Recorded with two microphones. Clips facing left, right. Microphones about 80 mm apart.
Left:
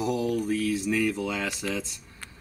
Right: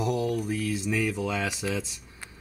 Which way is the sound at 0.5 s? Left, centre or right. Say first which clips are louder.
Left 3 dB; centre.